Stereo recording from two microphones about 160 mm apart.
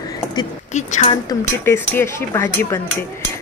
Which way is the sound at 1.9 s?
15° left (ahead or behind).